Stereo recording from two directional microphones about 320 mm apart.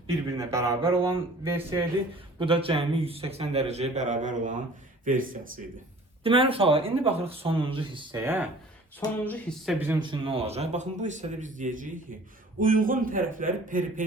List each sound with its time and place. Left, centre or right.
0.3 s a man's voice: centre
9.0 s speech: centre
9.8 s a man's voice: centre